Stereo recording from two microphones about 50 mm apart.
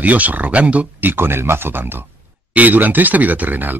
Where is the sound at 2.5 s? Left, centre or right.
Right.